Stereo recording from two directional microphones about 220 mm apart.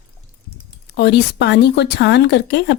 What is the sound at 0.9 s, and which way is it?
Speech, 50° left (ahead or behind).